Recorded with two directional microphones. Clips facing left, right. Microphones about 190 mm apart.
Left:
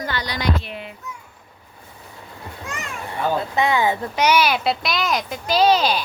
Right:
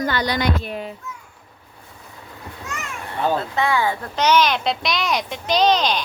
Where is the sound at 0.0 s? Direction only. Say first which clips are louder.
Right 4 dB; 50° right (ahead or behind).